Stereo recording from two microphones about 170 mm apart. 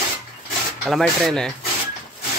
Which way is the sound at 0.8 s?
Centre (ahead or behind).